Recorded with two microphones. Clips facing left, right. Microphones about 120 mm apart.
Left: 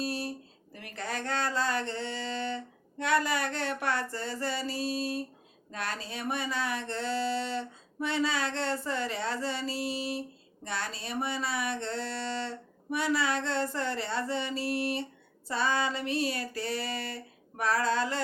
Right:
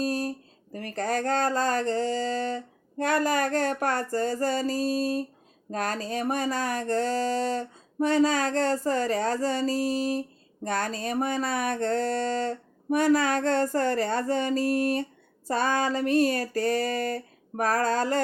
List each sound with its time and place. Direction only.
0.0 s speech: 45° right (ahead or behind)